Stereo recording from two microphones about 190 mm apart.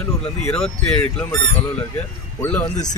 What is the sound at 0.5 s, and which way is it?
Speech, 5° left (ahead or behind).